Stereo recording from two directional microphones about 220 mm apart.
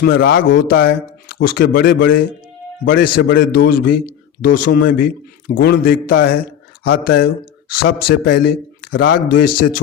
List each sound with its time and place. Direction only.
0.0 s speech: 45° left (ahead or behind)
3.0 s a man's voice: 60° left (ahead or behind)
3.3 s speech: 40° left (ahead or behind)